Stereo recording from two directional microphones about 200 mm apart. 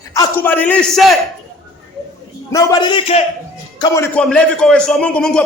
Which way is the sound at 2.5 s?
15° left (ahead or behind).